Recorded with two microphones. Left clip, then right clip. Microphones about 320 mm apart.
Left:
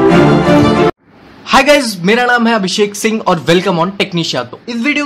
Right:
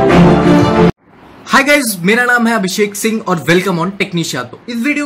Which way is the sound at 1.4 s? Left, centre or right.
Centre.